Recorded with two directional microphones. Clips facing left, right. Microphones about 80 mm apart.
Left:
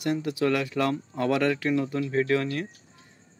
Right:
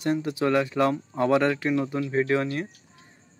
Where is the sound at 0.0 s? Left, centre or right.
Right.